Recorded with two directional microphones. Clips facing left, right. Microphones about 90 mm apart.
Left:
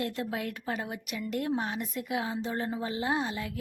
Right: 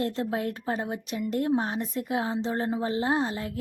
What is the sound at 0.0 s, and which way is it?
Speech, 30° right (ahead or behind).